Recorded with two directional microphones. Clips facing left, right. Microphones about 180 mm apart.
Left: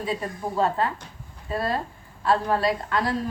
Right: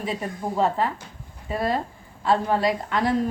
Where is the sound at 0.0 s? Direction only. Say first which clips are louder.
Even; 25° right (ahead or behind).